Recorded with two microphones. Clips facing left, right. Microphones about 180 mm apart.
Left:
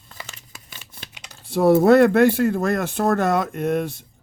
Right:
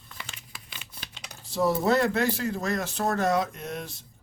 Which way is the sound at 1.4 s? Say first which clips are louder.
Left 10 dB; 55° left (ahead or behind).